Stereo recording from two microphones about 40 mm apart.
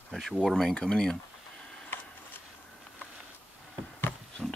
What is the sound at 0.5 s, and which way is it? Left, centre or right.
Speech, centre.